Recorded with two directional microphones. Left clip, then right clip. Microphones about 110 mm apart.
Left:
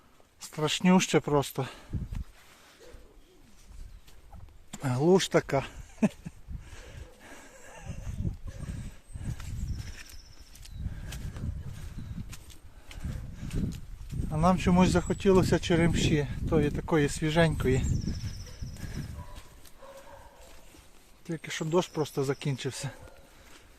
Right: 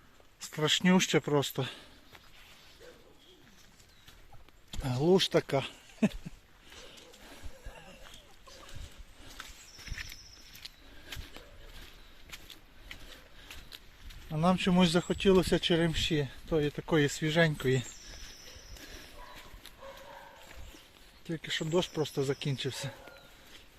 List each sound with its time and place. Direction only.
0.3 s a sound: 10° left (ahead or behind)
0.9 s speech: 30° left (ahead or behind)
1.2 s speech: 15° left (ahead or behind)
4.7 s speech: 45° left (ahead or behind)
5.4 s speech: 20° left (ahead or behind)
5.7 s a sound: 5° left (ahead or behind)
14.4 s speech: 15° left (ahead or behind)
15.4 s speech: 20° left (ahead or behind)
16.7 s speech: 15° left (ahead or behind)
17.2 s speech: 25° left (ahead or behind)
21.2 s speech: 15° left (ahead or behind)
21.5 s speech: 30° left (ahead or behind)
22.7 s speech: 35° left (ahead or behind)